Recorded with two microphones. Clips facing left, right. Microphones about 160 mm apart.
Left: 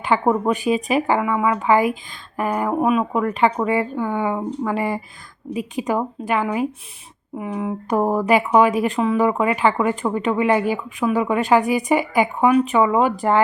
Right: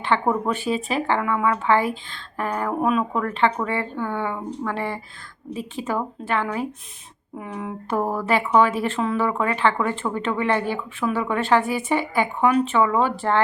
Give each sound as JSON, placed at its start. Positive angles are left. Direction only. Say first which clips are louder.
{"t": 0.0, "sound": "speech", "louder": "left 3 dB", "side_deg": 10}